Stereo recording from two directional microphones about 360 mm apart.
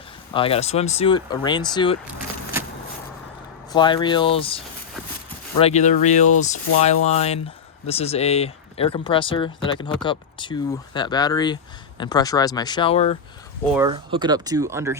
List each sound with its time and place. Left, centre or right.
0.3 s speech: centre
3.7 s speech: centre
13.7 s speech: centre